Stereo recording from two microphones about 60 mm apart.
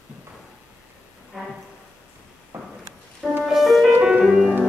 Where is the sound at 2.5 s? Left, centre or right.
Right.